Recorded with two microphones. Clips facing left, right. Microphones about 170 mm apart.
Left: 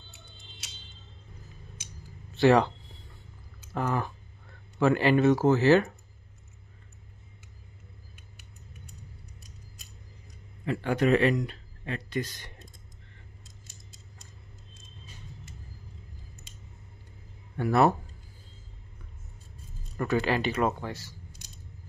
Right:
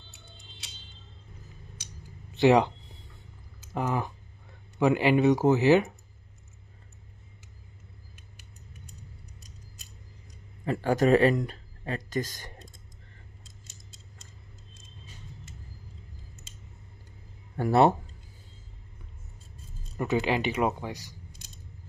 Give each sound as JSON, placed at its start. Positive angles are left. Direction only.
{"t": 2.3, "sound": "a sound", "side_deg": -20}
{"t": 3.7, "sound": "speech", "side_deg": -15}
{"t": 10.6, "sound": "speech", "side_deg": -40}
{"t": 17.6, "sound": "speech", "side_deg": -30}
{"t": 20.0, "sound": "speech", "side_deg": -15}